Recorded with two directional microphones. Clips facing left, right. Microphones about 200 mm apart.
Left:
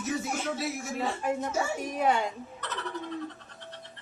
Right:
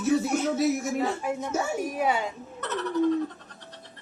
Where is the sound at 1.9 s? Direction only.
5° right (ahead or behind).